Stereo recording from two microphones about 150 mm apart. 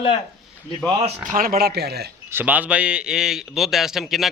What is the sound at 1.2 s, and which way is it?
Speech, 70° right (ahead or behind).